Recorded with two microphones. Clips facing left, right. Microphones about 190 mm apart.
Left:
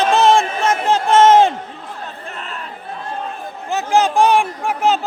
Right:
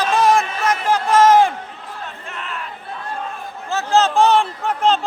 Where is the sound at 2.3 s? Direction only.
35° left (ahead or behind).